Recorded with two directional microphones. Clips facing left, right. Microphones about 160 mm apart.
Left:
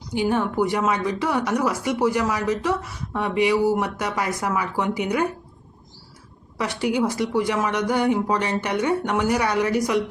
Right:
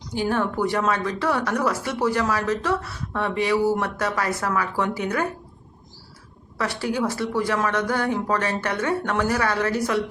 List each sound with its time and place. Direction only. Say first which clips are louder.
0.1 s speech: left 2 dB; 15° left (ahead or behind)
6.6 s speech: left 2 dB; 15° left (ahead or behind)